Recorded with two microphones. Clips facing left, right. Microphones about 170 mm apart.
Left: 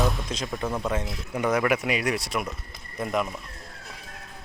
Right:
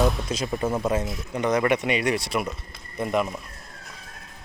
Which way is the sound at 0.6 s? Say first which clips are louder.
Right 4 dB; 15° right (ahead or behind).